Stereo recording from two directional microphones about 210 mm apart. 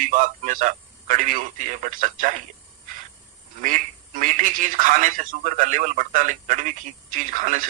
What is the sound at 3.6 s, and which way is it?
Speech, 40° right (ahead or behind).